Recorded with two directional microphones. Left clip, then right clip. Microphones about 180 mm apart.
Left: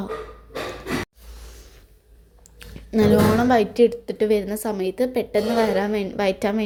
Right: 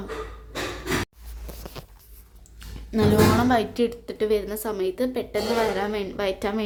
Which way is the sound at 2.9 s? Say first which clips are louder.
Left 2 dB; 15° left (ahead or behind).